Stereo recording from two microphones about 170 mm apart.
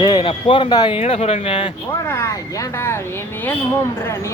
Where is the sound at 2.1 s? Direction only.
15° left (ahead or behind).